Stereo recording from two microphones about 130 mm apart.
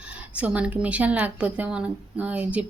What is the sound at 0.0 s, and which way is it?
Speech, 10° right (ahead or behind).